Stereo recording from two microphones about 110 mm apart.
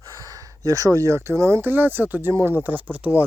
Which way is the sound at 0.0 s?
30° right (ahead or behind).